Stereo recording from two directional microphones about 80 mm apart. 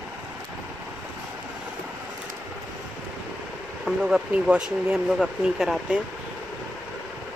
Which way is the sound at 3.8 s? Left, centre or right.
Centre.